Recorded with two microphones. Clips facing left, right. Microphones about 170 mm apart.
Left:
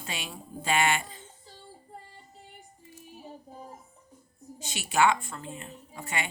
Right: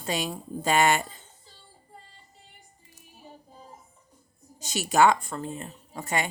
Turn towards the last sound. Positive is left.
turn(degrees=-40)  # may be behind; listen again after turning